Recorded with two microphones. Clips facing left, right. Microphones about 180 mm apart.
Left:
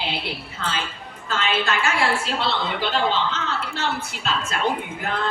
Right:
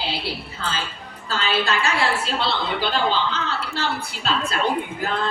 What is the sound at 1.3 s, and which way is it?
Speech, 35° right (ahead or behind).